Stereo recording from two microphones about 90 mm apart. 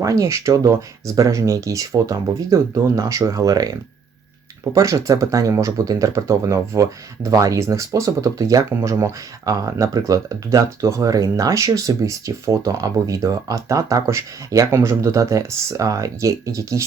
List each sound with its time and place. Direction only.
0.0 s speech: 35° right (ahead or behind)